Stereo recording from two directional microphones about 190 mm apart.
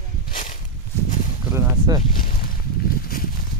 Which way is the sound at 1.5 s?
15° right (ahead or behind).